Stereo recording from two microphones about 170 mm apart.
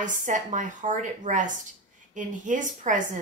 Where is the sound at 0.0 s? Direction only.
50° right (ahead or behind).